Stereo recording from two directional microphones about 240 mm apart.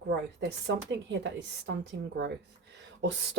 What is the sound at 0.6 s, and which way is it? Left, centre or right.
Speech, right.